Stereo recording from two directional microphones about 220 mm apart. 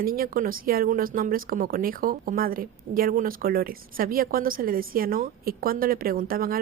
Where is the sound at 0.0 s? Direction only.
40° right (ahead or behind).